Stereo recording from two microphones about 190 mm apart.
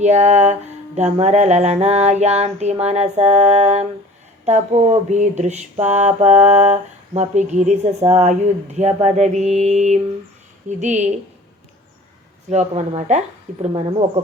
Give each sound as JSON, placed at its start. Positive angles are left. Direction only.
{"t": 0.0, "sound": "mantra", "side_deg": -35}
{"t": 12.5, "sound": "mantra", "side_deg": -35}